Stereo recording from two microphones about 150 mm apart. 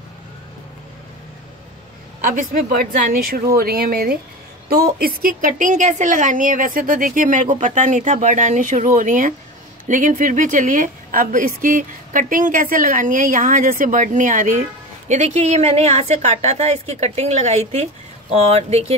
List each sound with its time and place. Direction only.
2.2 s a woman's voice: 65° right (ahead or behind)
3.5 s speech: 90° right
4.9 s a woman's voice: 75° right (ahead or behind); by 14.6 s 60° right (ahead or behind)
15.0 s a woman's voice: 50° right (ahead or behind)